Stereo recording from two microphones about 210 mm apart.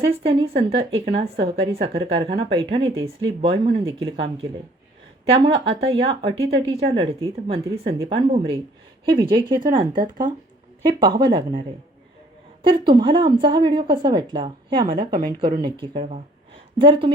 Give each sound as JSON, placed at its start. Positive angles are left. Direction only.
{"t": 0.0, "sound": "a woman's voice", "side_deg": -25}
{"t": 12.6, "sound": "a woman's voice", "side_deg": -25}